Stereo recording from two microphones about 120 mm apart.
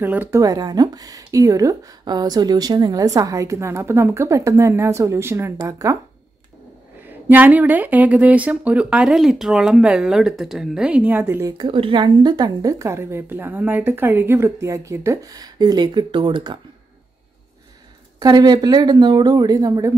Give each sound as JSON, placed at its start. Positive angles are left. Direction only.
{"t": 0.0, "sound": "speech", "side_deg": -15}
{"t": 0.4, "sound": "speech", "side_deg": -30}
{"t": 7.1, "sound": "speech", "side_deg": -15}
{"t": 11.5, "sound": "speech", "side_deg": -45}
{"t": 18.2, "sound": "speech", "side_deg": -35}